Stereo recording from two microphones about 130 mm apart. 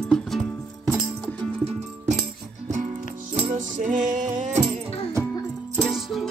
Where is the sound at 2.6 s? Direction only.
65° right (ahead or behind).